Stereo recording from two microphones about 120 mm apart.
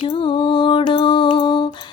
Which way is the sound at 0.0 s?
45° left (ahead or behind).